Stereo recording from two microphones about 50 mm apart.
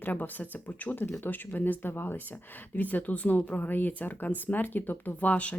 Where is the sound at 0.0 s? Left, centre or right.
Left.